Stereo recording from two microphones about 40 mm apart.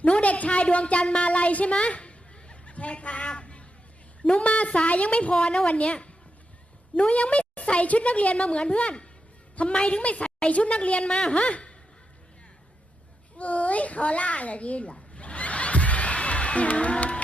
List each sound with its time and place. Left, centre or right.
0.0 s a woman's voice: left
13.3 s a child's voice: left